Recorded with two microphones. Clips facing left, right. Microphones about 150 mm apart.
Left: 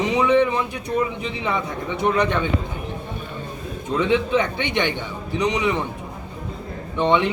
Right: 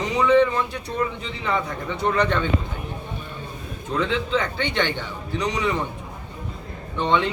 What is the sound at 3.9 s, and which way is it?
A man's voice, 15° left (ahead or behind).